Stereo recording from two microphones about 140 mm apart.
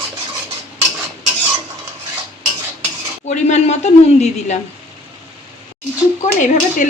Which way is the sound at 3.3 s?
55° left (ahead or behind).